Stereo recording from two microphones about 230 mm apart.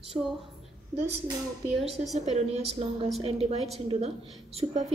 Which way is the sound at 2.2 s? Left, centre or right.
Right.